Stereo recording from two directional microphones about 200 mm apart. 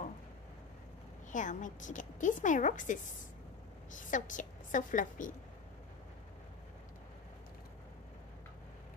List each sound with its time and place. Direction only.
1.3 s a woman's voice: 40° left (ahead or behind)
4.1 s a woman's voice: 40° left (ahead or behind)